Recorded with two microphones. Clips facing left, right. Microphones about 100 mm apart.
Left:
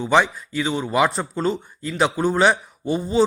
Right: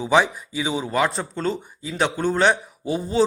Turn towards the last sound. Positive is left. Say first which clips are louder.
# left 2 dB
turn(degrees=0)  # may be behind; listen again after turning